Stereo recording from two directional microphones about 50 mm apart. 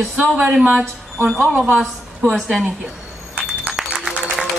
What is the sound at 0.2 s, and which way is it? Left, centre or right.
Speech, right.